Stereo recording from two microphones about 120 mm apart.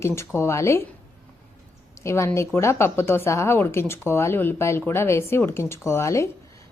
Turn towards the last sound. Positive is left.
turn(degrees=25)  # may be behind; listen again after turning